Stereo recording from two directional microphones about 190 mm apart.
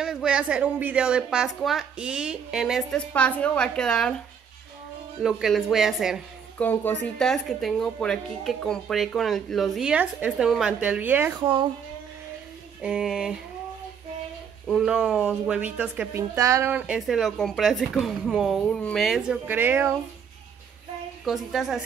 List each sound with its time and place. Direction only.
0.0 s a woman's voice: 5° right (ahead or behind)
5.2 s a woman's voice: centre (ahead or behind)
6.6 s a woman's voice: 10° left (ahead or behind); by 11.3 s 10° right (ahead or behind)
11.3 s a woman's voice: 25° right (ahead or behind)
12.8 s a woman's voice: 5° right (ahead or behind)
14.7 s a woman's voice: centre (ahead or behind)
21.5 s a woman's voice: centre (ahead or behind)